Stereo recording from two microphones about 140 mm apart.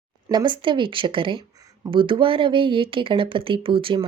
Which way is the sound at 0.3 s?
30° right (ahead or behind).